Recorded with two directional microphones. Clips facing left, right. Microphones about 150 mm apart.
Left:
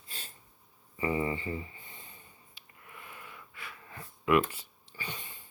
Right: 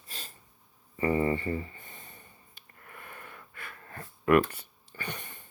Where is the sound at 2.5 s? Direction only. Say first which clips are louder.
Right 2 dB; 50° right (ahead or behind).